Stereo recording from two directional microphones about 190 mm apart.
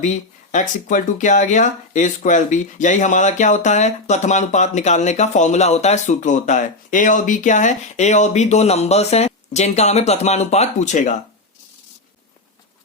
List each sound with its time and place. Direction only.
0.0 s speech: 40° left (ahead or behind)